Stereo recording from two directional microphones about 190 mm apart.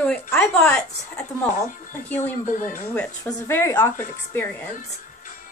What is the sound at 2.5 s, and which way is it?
Speech, 40° left (ahead or behind).